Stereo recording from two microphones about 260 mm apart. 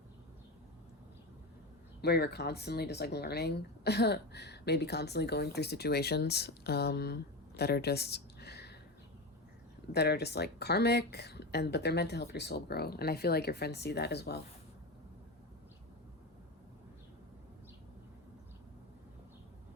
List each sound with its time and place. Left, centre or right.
2.0 s speech: left
9.9 s speech: left